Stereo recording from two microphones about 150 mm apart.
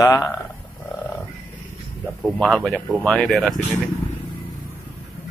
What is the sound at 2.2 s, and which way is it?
Speech, 5° left (ahead or behind).